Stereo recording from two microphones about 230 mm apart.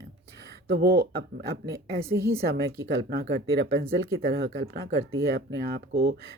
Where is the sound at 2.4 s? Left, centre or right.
Right.